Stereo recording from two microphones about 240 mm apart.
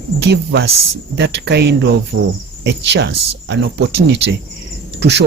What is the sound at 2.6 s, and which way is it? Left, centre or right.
Speech, right.